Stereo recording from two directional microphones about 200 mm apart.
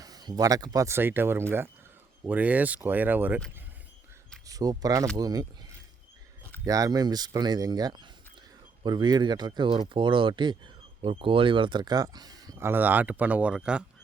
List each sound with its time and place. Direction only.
0.0 s speech: 20° right (ahead or behind)
4.4 s speech: 20° right (ahead or behind)
6.7 s speech: 20° right (ahead or behind)